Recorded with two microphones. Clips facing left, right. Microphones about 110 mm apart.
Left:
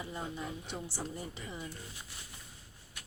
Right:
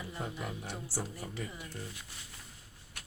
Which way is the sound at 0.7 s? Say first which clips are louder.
Even; 20° left (ahead or behind).